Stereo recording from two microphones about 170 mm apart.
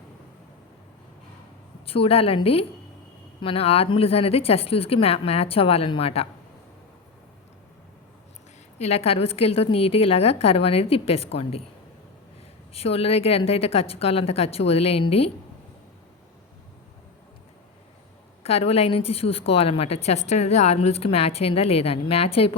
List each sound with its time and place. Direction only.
1.9 s a woman's voice: 35° left (ahead or behind)
8.8 s a woman's voice: 40° left (ahead or behind)
12.7 s a woman's voice: 35° left (ahead or behind)
18.4 s a woman's voice: 35° left (ahead or behind)